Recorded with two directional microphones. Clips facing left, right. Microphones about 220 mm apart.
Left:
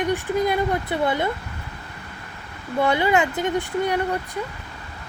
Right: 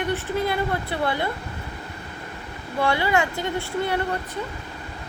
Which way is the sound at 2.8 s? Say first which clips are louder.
Left 3 dB; 20° left (ahead or behind).